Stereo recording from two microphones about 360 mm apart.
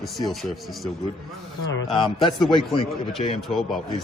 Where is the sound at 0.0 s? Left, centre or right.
Centre.